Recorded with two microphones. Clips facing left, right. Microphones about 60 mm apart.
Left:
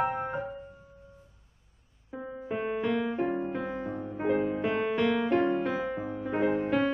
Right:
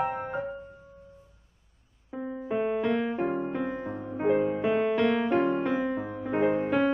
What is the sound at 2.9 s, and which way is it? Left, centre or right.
Music, centre.